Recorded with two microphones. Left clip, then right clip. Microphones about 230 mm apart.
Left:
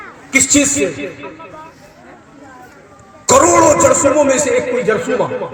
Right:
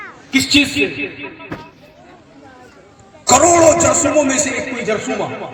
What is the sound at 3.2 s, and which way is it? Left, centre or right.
A man's voice, left.